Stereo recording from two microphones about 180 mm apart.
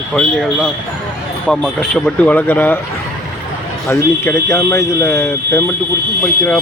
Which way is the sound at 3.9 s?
15° left (ahead or behind).